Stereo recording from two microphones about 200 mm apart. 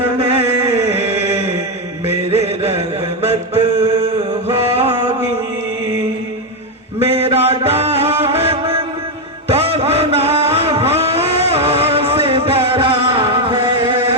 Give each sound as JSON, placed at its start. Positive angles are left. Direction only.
{"t": 0.2, "sound": "a sound", "side_deg": -30}
{"t": 1.1, "sound": "mantra", "side_deg": -30}
{"t": 7.0, "sound": "mantra", "side_deg": -30}
{"t": 9.5, "sound": "vehicle", "side_deg": -30}